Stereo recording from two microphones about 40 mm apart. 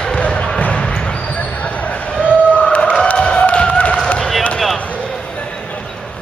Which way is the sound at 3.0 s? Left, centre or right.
Left.